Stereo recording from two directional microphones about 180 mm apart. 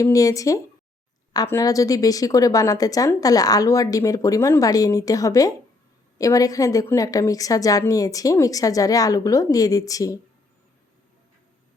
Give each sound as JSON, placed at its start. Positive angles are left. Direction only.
{"t": 0.0, "sound": "a woman's voice", "side_deg": 20}